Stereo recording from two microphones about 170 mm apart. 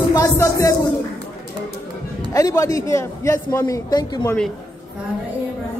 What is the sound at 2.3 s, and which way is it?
A man's voice, 20° left (ahead or behind).